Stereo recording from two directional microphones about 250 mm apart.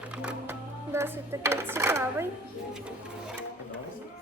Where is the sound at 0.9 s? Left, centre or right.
Centre.